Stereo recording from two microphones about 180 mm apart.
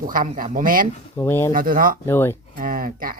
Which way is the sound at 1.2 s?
10° left (ahead or behind).